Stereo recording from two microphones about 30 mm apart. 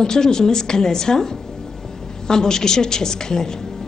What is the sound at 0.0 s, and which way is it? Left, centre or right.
Speech, left.